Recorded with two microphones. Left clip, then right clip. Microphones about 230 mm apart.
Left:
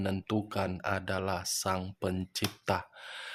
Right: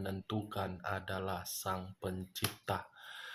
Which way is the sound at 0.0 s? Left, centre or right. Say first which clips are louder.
Left 7 dB; left.